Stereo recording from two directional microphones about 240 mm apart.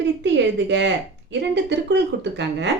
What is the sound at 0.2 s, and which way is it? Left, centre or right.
A woman's voice, right.